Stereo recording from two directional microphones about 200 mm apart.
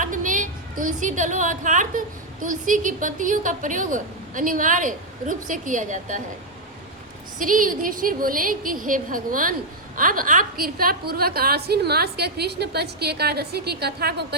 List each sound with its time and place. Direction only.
0.0 s a woman's voice: 40° right (ahead or behind)
7.3 s a woman's voice: 40° right (ahead or behind)